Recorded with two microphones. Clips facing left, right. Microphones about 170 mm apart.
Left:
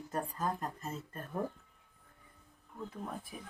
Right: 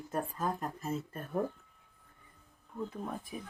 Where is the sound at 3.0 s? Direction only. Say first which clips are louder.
Right 3 dB; 5° left (ahead or behind).